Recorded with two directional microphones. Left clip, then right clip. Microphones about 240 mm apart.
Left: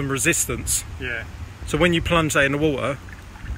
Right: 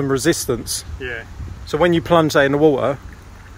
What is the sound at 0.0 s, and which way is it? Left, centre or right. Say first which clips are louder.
Speech: right 4 dB; right.